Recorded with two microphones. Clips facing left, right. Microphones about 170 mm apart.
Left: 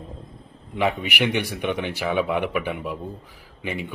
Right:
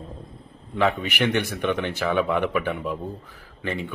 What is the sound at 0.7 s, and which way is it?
A man's voice, 15° left (ahead or behind).